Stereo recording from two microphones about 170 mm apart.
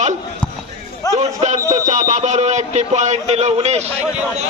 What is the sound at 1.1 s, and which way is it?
Speech, 45° right (ahead or behind).